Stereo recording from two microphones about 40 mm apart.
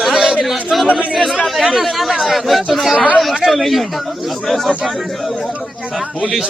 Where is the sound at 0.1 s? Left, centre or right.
Centre.